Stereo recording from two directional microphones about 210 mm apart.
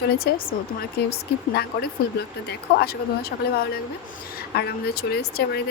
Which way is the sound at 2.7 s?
50° left (ahead or behind).